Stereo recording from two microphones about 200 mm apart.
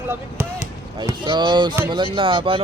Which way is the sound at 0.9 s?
20° right (ahead or behind).